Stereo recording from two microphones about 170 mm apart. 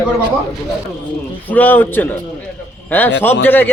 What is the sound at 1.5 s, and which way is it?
Speech, 10° left (ahead or behind).